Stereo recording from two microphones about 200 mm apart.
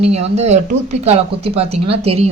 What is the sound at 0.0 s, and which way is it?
Speech, 30° right (ahead or behind).